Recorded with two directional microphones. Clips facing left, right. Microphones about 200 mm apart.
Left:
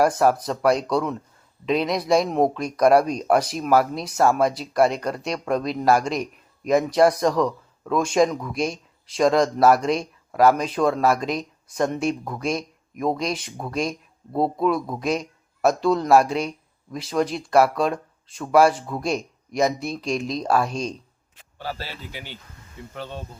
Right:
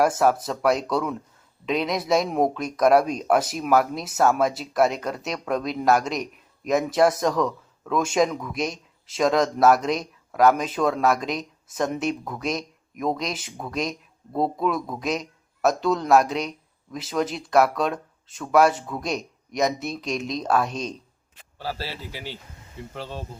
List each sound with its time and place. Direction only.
0.4 s a man's voice: centre (ahead or behind)
22.1 s speech: 30° right (ahead or behind)